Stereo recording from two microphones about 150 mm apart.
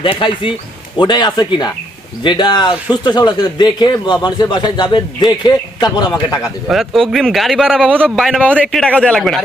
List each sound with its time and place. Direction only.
0.0 s speech: 35° left (ahead or behind)
6.7 s speech: centre (ahead or behind)